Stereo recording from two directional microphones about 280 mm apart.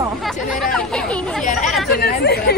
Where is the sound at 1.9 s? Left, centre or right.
Left.